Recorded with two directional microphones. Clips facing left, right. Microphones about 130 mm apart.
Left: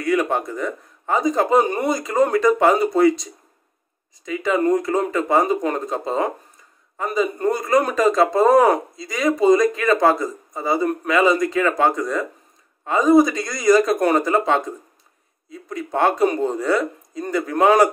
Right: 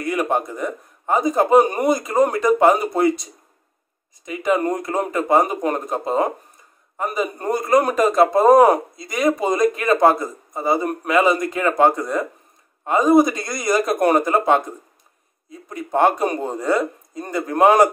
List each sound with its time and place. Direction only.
0.0 s speech: 15° right (ahead or behind)
4.3 s speech: 15° right (ahead or behind)
15.9 s speech: 15° right (ahead or behind)